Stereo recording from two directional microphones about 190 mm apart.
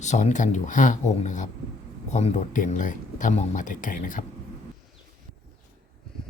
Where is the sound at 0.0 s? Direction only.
40° left (ahead or behind).